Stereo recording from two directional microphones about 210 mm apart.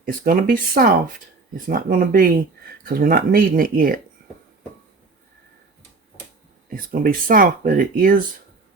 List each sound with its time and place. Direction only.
0.0 s speech: 40° right (ahead or behind)
6.7 s speech: 45° right (ahead or behind)